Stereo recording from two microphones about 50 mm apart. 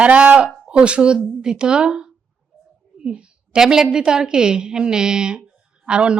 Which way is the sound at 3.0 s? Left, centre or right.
Right.